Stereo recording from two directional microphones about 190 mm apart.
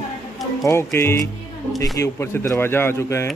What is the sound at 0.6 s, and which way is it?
Speech, 15° left (ahead or behind).